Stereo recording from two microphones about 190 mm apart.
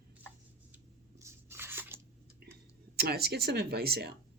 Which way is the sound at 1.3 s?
10° right (ahead or behind).